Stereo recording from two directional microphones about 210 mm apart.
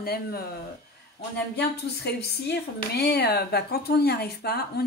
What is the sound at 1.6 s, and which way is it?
Speech, 50° left (ahead or behind).